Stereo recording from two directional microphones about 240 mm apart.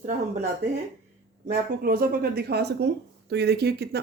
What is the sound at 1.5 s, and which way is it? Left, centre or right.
Speech, right.